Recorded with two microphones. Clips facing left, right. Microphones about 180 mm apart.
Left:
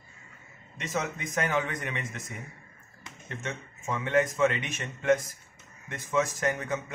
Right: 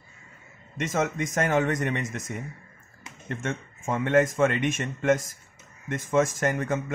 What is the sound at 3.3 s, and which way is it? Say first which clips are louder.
A man's voice: right 4 dB; 50° right (ahead or behind).